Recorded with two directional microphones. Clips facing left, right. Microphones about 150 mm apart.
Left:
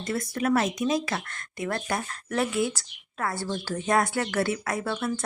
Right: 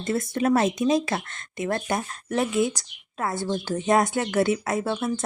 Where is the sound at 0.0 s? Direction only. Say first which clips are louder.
Right 4 dB; 25° right (ahead or behind).